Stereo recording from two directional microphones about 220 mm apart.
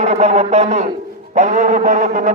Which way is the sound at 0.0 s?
30° right (ahead or behind).